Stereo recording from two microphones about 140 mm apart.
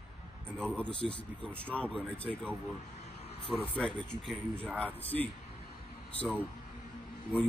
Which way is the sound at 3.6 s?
10° left (ahead or behind).